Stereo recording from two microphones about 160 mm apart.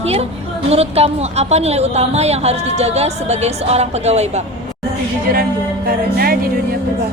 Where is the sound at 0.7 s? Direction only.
40° right (ahead or behind).